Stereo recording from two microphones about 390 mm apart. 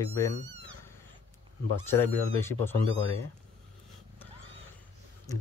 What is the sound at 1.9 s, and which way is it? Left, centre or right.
Speech, centre.